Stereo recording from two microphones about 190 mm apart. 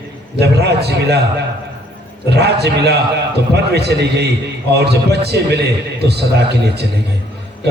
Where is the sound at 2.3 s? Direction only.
60° right (ahead or behind).